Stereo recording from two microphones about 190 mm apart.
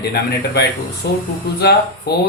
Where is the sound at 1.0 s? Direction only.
60° left (ahead or behind).